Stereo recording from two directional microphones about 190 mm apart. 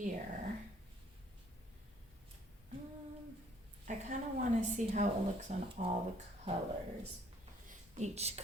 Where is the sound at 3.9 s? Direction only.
40° right (ahead or behind).